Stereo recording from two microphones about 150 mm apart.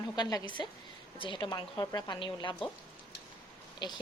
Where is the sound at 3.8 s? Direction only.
30° left (ahead or behind).